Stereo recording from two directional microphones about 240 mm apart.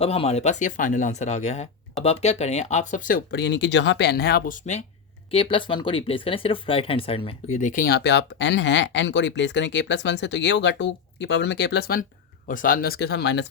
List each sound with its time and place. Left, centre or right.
0.0 s speech: left